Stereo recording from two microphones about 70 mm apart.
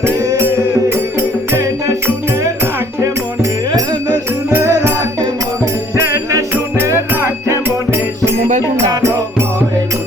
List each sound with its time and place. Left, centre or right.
1.5 s music: right
4.5 s music: right
7.2 s music: right
8.9 s music: right